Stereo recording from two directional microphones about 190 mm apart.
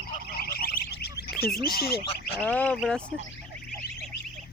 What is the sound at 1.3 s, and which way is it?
Duck, 55° left (ahead or behind).